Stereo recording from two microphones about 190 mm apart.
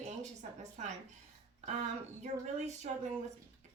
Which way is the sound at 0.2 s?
35° right (ahead or behind).